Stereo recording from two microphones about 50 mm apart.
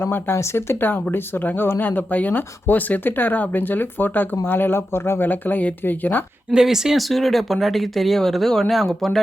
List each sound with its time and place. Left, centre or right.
0.0 s speech: left
0.8 s speech: left
5.2 s speech: left
6.5 s speech: centre
7.1 s speech: centre